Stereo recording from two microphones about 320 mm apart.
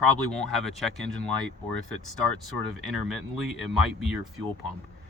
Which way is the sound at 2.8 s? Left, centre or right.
Centre.